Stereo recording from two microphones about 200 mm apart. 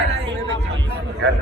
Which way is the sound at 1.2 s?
60° right (ahead or behind).